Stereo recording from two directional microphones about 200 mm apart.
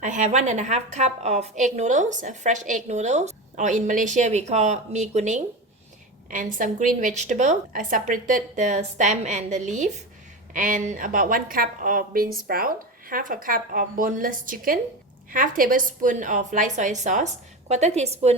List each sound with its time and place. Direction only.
0.0 s a woman's voice: 40° right (ahead or behind)